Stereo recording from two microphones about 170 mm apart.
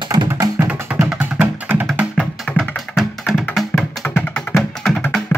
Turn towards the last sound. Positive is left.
turn(degrees=10)  # may be behind; listen again after turning